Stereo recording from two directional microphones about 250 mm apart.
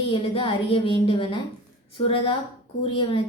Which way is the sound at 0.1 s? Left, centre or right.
Left.